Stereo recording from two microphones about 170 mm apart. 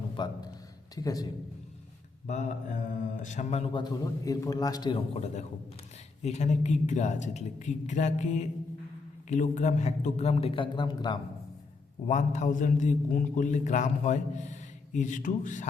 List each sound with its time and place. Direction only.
0.2 s a man's voice: 25° left (ahead or behind)
2.2 s a man's voice: 45° left (ahead or behind)
3.7 s a man's voice: 25° left (ahead or behind)
12.0 s a man's voice: 45° left (ahead or behind)